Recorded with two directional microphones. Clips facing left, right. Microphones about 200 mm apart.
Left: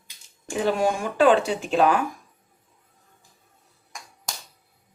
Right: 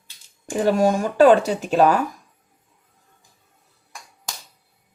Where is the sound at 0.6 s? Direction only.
40° right (ahead or behind).